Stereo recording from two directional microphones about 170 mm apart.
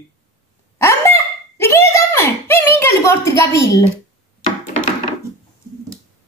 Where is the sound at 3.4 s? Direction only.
15° left (ahead or behind).